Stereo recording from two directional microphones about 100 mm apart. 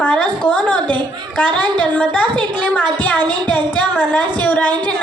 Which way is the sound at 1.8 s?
15° left (ahead or behind).